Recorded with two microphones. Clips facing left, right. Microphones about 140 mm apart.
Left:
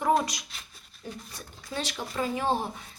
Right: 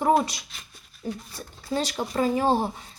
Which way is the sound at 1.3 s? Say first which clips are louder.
Right 7 dB; 30° right (ahead or behind).